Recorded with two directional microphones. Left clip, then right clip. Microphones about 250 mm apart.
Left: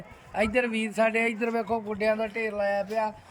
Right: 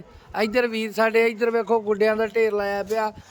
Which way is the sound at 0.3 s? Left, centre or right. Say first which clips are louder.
Right 4 dB; centre.